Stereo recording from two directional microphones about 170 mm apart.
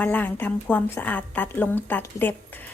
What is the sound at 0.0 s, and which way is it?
A woman's voice, 10° left (ahead or behind).